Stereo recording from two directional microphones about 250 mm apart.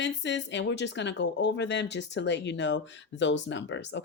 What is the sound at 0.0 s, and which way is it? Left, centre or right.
Speech, left.